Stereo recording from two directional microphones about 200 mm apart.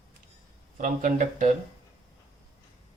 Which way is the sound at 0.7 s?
40° right (ahead or behind).